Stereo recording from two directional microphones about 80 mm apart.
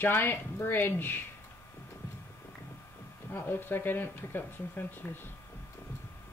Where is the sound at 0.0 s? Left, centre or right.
Left.